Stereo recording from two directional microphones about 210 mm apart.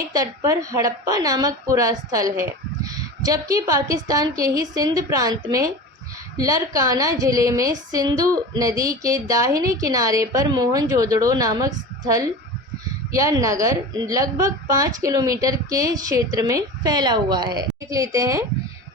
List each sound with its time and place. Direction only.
0.1 s a woman's voice: 15° right (ahead or behind)